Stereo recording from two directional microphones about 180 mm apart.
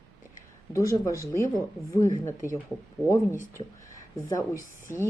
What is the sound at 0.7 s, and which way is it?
Speech, 15° left (ahead or behind).